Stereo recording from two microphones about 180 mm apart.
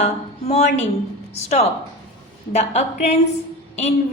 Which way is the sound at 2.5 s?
40° left (ahead or behind).